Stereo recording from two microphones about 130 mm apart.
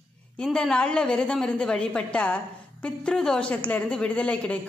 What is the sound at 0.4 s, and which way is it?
A woman's voice, 5° left (ahead or behind).